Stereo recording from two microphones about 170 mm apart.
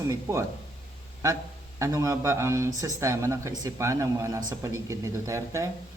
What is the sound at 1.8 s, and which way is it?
Speech, 20° right (ahead or behind).